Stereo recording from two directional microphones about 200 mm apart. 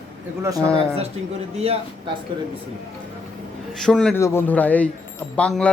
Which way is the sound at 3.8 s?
5° left (ahead or behind).